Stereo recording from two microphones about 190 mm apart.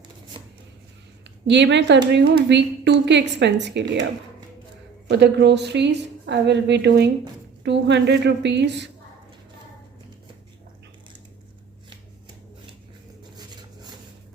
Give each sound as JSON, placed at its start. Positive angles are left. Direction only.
{"t": 1.5, "sound": "a woman's voice", "side_deg": -65}
{"t": 5.0, "sound": "a woman's voice", "side_deg": -65}